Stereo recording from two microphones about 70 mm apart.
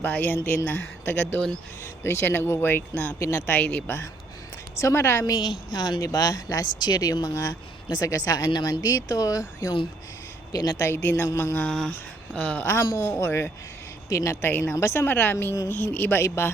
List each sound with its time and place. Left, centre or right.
0.0 s speech: left
1.8 s speech: left
3.2 s a woman's voice: left
3.5 s a woman's voice: left
5.2 s speech: left
10.8 s speech: left
11.9 s speech: centre
12.6 s a woman's voice: left
14.4 s speech: left
15.1 s speech: left
16.2 s speech: left